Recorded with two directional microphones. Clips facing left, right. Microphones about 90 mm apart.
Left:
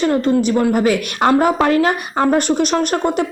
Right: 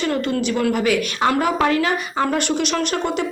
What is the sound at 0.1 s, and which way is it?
A woman's voice, 35° left (ahead or behind).